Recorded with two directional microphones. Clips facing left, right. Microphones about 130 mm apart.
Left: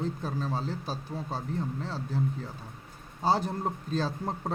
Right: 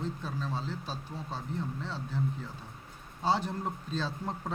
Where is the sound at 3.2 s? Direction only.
40° left (ahead or behind).